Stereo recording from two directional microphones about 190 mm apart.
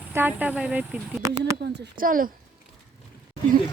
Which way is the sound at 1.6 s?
65° right (ahead or behind).